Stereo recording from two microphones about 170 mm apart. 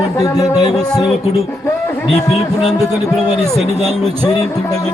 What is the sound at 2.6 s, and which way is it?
Speech, centre (ahead or behind).